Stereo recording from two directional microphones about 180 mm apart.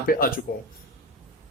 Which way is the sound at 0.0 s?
55° left (ahead or behind).